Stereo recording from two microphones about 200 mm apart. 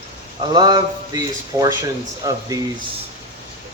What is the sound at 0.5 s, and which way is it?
A man's voice, 20° right (ahead or behind).